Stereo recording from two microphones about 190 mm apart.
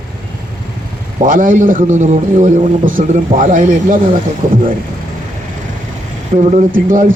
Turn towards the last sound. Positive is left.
turn(degrees=-45)  # may be behind; listen again after turning